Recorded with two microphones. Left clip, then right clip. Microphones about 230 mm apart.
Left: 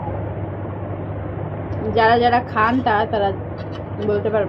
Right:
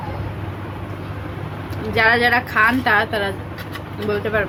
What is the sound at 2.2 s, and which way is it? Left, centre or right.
A woman's voice, right.